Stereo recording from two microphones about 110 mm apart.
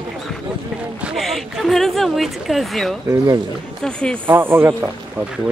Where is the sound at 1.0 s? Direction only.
Centre (ahead or behind).